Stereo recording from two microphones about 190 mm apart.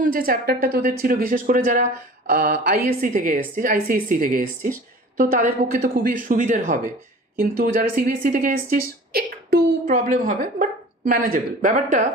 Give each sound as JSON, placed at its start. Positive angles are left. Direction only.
{"t": 0.0, "sound": "a woman's voice", "side_deg": -50}